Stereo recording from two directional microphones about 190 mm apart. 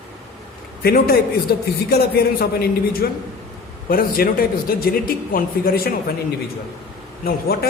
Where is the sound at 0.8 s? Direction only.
55° left (ahead or behind).